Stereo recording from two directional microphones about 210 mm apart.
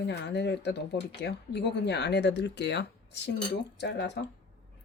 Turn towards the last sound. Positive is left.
turn(degrees=55)  # may be behind; listen again after turning